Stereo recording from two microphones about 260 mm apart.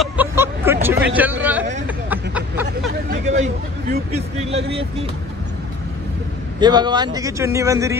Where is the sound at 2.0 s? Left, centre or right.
Centre.